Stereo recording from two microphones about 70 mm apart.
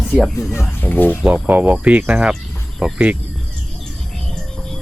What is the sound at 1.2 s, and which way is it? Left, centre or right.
Speech, right.